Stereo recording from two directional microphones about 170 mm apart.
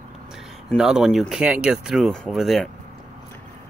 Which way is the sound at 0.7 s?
Centre (ahead or behind).